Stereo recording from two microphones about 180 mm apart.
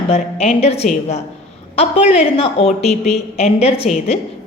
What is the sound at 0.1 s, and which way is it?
A woman's voice, 35° left (ahead or behind).